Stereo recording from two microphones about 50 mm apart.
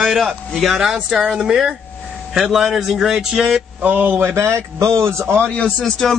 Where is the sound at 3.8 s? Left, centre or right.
Right.